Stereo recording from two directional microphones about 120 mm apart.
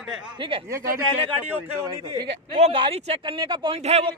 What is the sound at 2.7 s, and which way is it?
Speech, 50° right (ahead or behind).